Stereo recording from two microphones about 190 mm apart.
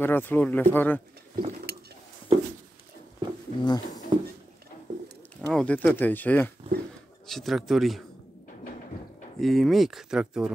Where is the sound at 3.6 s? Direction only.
20° left (ahead or behind).